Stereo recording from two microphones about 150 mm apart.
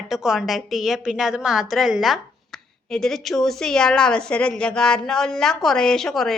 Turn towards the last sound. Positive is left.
turn(degrees=5)  # may be behind; listen again after turning